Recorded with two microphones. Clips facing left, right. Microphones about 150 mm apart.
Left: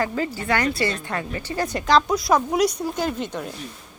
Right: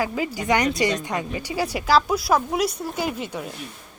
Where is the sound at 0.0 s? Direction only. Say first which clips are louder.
Even; 10° right (ahead or behind).